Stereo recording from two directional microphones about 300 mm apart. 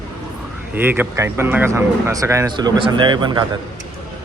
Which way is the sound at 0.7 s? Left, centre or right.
Centre.